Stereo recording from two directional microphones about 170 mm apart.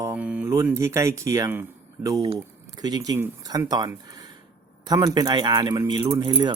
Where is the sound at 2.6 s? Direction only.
25° right (ahead or behind).